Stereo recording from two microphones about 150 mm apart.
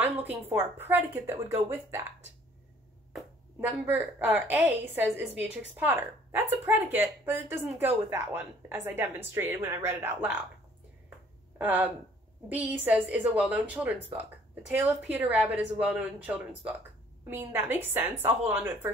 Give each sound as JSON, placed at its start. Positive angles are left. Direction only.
{"t": 0.0, "sound": "a woman's voice", "side_deg": -10}
{"t": 3.6, "sound": "a woman's voice", "side_deg": -10}
{"t": 11.5, "sound": "a woman's voice", "side_deg": -10}